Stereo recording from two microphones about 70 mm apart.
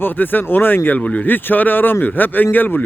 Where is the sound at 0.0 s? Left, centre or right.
Left.